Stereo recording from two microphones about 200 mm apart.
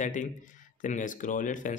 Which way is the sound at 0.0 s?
40° left (ahead or behind).